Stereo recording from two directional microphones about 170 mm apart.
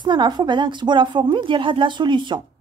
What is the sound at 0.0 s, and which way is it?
A woman's voice, 25° right (ahead or behind).